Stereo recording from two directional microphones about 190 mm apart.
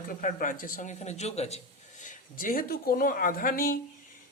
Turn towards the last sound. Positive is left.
turn(degrees=50)  # may be behind; listen again after turning